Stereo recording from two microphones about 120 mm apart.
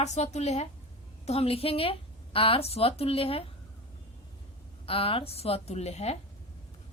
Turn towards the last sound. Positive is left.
turn(degrees=60)  # may be behind; listen again after turning